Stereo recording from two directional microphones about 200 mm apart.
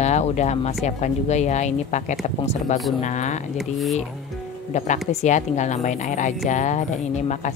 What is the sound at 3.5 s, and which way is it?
Speech, centre (ahead or behind).